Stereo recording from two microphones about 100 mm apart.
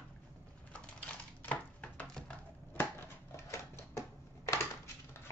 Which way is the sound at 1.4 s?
15° left (ahead or behind).